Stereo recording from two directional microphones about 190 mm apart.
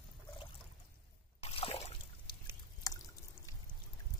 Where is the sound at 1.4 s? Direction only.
30° left (ahead or behind).